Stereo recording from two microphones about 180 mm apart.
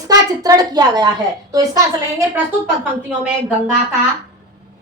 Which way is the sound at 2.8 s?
5° right (ahead or behind).